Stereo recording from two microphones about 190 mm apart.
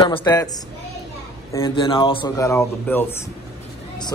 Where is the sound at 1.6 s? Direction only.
25° left (ahead or behind).